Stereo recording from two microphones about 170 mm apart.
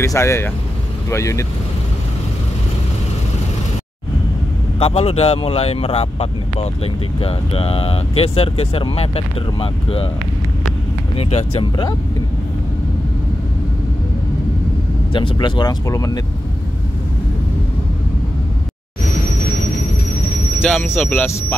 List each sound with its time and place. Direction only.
0.0 s speech: 15° left (ahead or behind)
4.7 s speech: 35° left (ahead or behind)
11.1 s speech: 35° left (ahead or behind)
15.1 s speech: 30° left (ahead or behind)
20.6 s speech: 10° left (ahead or behind)